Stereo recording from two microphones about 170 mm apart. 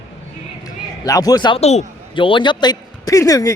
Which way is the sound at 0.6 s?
20° left (ahead or behind).